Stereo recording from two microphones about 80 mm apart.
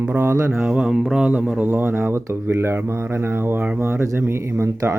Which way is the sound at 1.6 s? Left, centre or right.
Right.